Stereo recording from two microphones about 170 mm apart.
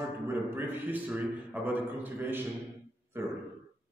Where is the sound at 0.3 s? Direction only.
10° right (ahead or behind).